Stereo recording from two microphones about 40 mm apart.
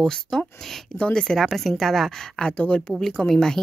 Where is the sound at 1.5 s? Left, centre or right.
Centre.